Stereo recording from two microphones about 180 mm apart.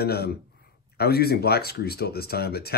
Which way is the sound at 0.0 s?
60° left (ahead or behind).